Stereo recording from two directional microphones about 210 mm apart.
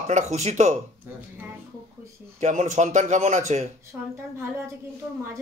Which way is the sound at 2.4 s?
35° right (ahead or behind).